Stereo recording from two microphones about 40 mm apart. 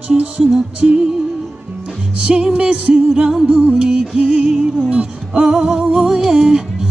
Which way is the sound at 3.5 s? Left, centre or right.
Right.